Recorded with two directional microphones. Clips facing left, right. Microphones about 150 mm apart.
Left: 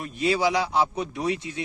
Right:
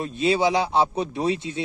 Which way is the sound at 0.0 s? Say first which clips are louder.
Right 3 dB; 25° right (ahead or behind).